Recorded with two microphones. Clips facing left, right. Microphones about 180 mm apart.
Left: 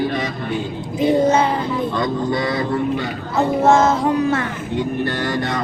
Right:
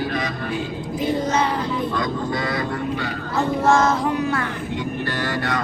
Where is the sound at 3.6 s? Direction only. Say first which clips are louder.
Left 3 dB; 25° left (ahead or behind).